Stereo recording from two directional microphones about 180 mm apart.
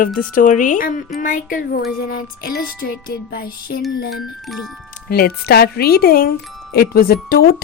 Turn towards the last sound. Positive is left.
turn(degrees=60)  # may be behind; listen again after turning